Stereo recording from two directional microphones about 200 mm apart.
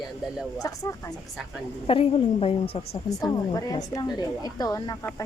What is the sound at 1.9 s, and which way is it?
A woman's voice, 30° left (ahead or behind).